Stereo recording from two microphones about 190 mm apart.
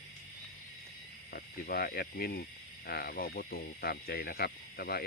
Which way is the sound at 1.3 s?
55° left (ahead or behind).